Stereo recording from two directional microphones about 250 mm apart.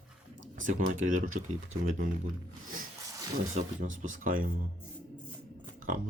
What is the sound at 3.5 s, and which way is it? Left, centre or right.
Speech, right.